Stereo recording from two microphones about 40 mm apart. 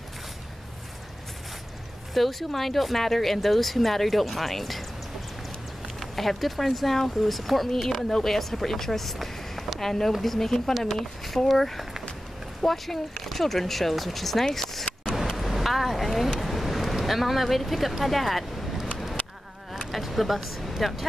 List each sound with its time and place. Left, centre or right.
2.1 s speech: centre
5.9 s speech: centre
15.3 s a sound: centre
16.3 s speech: centre
19.2 s a sound: left
19.9 s vehicle: centre
20.8 s speech: centre